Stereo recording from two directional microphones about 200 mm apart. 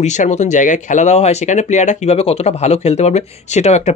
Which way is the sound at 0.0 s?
35° left (ahead or behind).